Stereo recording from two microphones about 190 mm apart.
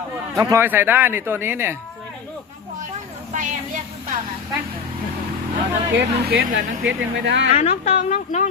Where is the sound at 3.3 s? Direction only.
40° right (ahead or behind).